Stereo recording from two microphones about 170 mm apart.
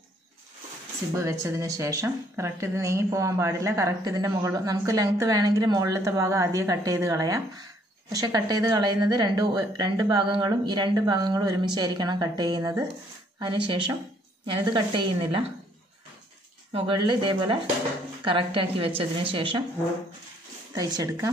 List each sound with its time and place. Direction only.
1.1 s a woman's voice: 20° right (ahead or behind)
16.7 s a woman's voice: 30° right (ahead or behind)
20.7 s speech: 20° right (ahead or behind)